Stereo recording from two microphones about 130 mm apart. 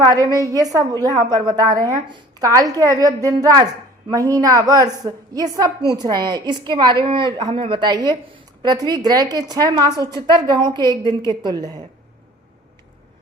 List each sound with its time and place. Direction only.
0.1 s a woman's voice: 30° right (ahead or behind)